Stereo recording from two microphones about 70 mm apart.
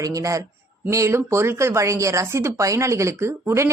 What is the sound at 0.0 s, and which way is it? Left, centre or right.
A man's voice, right.